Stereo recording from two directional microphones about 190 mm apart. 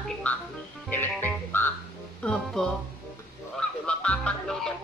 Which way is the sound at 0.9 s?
10° left (ahead or behind).